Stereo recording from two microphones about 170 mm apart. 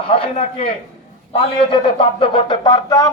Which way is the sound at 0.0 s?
30° left (ahead or behind).